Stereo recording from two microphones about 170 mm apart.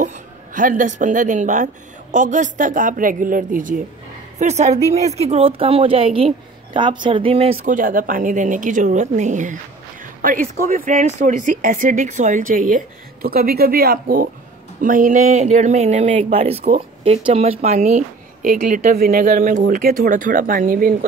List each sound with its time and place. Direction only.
0.0 s speech: 50° right (ahead or behind); by 7.5 s 35° right (ahead or behind)
7.6 s speech: 50° right (ahead or behind)
19.7 s speech: 55° right (ahead or behind)